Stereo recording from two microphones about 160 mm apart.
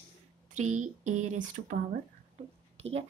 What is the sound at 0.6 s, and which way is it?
Speech, 50° right (ahead or behind).